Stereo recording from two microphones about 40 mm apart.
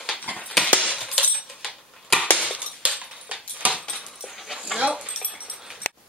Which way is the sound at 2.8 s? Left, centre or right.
Right.